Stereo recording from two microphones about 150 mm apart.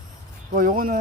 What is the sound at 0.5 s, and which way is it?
Speech, 70° right (ahead or behind).